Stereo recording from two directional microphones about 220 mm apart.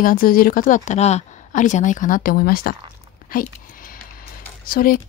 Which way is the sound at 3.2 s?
40° left (ahead or behind).